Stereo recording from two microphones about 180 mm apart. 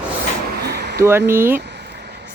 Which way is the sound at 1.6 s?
70° right (ahead or behind).